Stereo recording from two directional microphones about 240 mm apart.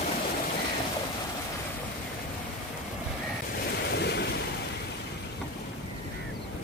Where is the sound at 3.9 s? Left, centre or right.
Left.